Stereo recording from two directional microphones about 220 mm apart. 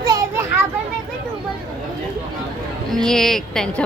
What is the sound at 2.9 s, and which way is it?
Speech, centre (ahead or behind).